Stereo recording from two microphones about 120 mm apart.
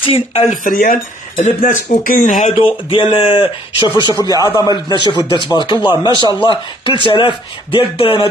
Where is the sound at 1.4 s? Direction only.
90° left.